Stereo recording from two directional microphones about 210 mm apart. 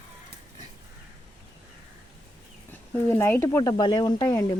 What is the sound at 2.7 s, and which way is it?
Speech, 10° left (ahead or behind).